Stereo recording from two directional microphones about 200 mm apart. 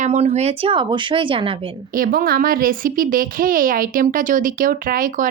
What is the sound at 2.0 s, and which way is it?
A woman's voice, 45° right (ahead or behind).